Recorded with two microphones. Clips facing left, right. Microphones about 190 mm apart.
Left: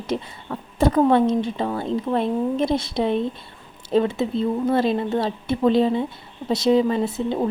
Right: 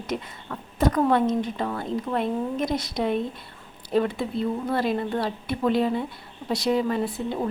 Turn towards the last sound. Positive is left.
turn(degrees=25)  # may be behind; listen again after turning